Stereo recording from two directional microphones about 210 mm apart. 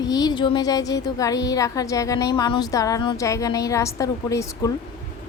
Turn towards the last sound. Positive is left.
turn(degrees=15)  # may be behind; listen again after turning